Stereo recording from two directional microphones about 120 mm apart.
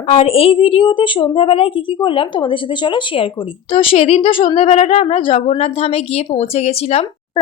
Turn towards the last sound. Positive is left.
turn(degrees=60)  # may be behind; listen again after turning